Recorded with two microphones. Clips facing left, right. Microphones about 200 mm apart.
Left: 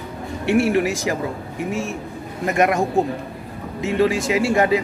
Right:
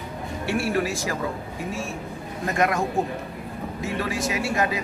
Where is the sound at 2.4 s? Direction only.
20° left (ahead or behind).